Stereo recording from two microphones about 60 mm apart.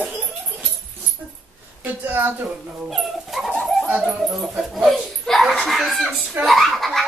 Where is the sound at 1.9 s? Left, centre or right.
Right.